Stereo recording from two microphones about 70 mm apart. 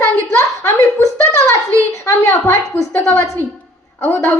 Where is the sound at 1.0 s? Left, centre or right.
Left.